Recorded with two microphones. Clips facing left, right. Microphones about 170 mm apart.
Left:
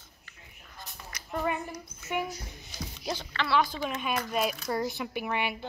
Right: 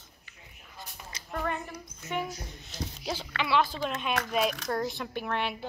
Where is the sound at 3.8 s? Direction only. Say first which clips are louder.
Right 1 dB; 5° left (ahead or behind).